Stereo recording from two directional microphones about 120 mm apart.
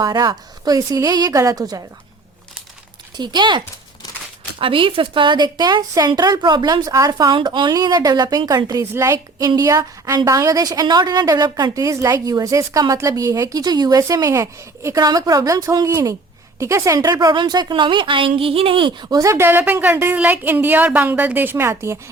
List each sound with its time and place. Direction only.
0.0 s a woman's voice: 35° right (ahead or behind)
3.2 s a woman's voice: 40° right (ahead or behind)
4.6 s a woman's voice: 45° right (ahead or behind)
19.0 s a woman's voice: 25° right (ahead or behind)